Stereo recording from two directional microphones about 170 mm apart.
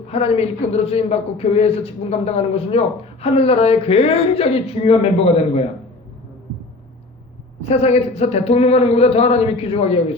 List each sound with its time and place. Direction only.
0.1 s a man's voice: 35° left (ahead or behind)
7.6 s a man's voice: 40° left (ahead or behind)